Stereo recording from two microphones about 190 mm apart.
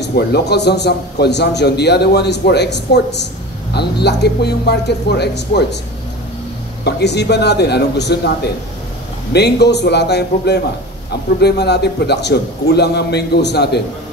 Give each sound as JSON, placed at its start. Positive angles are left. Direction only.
{"t": 0.0, "sound": "a man's voice", "side_deg": 60}
{"t": 6.8, "sound": "a man's voice", "side_deg": 60}
{"t": 9.3, "sound": "a man's voice", "side_deg": 60}